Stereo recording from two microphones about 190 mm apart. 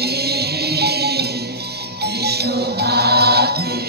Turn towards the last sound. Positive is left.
turn(degrees=-55)  # may be behind; listen again after turning